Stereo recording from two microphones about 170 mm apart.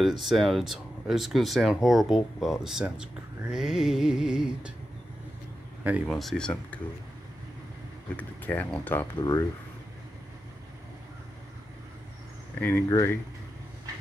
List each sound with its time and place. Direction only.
0.0 s speech: centre (ahead or behind)
6.0 s speech: 5° left (ahead or behind)
8.2 s speech: 10° left (ahead or behind)
12.5 s speech: 10° left (ahead or behind)